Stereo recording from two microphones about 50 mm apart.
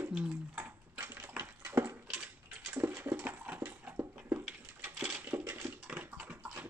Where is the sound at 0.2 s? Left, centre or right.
Right.